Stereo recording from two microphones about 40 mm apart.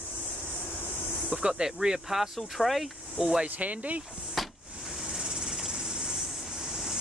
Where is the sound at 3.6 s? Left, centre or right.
Right.